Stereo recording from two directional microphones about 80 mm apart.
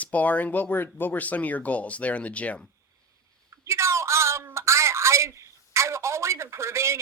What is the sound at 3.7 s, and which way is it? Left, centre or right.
A man's voice, right.